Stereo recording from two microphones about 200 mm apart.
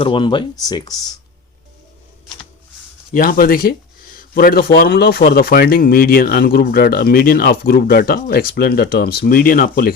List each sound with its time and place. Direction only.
0.0 s speech: 25° left (ahead or behind)
3.1 s speech: 45° left (ahead or behind)